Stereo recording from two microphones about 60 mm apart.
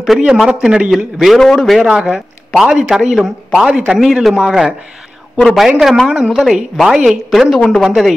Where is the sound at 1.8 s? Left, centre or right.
Centre.